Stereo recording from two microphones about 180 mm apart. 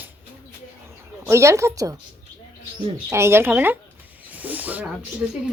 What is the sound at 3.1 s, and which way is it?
Speech, 15° right (ahead or behind).